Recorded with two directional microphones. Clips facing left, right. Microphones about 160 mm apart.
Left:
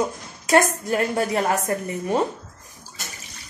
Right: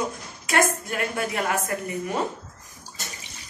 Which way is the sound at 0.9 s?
35° left (ahead or behind).